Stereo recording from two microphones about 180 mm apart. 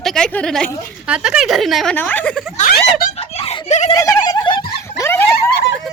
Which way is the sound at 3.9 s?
20° left (ahead or behind).